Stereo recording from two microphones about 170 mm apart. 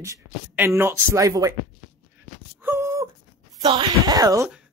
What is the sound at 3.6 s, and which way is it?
Speech, 25° right (ahead or behind).